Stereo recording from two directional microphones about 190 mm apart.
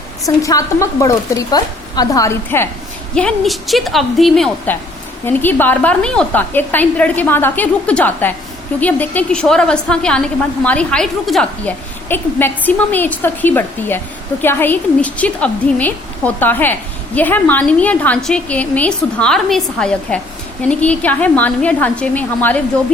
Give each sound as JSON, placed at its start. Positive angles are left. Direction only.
{"t": 0.4, "sound": "a woman's voice", "side_deg": 15}
{"t": 3.2, "sound": "a woman's voice", "side_deg": 0}